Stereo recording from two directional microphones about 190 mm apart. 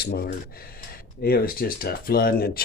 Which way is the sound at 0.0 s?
55° left (ahead or behind).